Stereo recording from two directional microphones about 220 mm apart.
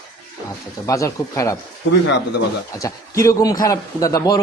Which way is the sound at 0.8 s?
15° left (ahead or behind).